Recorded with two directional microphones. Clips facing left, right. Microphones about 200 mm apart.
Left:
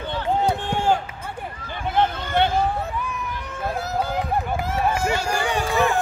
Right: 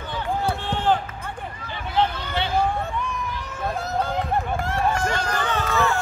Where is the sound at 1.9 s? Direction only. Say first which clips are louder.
Left 2 dB; 50° left (ahead or behind).